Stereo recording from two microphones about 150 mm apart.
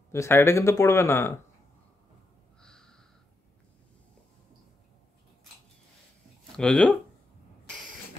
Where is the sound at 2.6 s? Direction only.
5° left (ahead or behind).